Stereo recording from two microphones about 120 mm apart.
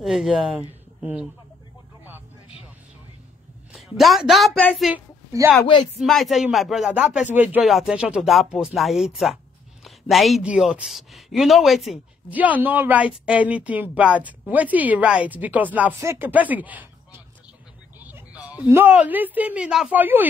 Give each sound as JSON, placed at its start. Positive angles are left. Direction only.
{"t": 0.0, "sound": "speech", "side_deg": 0}
{"t": 0.6, "sound": "speech", "side_deg": -15}
{"t": 3.7, "sound": "a woman's voice", "side_deg": 0}
{"t": 7.6, "sound": "speech", "side_deg": -5}
{"t": 9.8, "sound": "a sound", "side_deg": 0}
{"t": 10.4, "sound": "speech", "side_deg": -10}
{"t": 12.3, "sound": "a woman's voice", "side_deg": -15}